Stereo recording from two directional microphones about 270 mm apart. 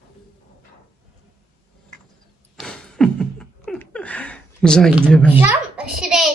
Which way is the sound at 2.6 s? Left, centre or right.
Centre.